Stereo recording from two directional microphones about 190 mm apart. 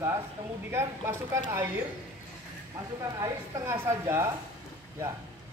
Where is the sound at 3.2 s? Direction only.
15° right (ahead or behind).